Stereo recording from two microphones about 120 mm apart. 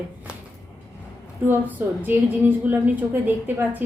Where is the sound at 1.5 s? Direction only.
15° right (ahead or behind).